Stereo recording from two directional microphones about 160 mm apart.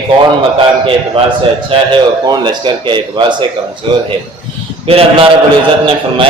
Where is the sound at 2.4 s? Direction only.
30° right (ahead or behind).